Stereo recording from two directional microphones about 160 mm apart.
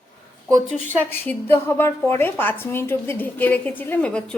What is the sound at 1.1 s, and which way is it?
A woman's voice, 15° left (ahead or behind).